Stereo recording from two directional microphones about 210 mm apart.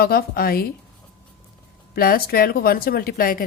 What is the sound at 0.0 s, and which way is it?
Speech, 45° left (ahead or behind).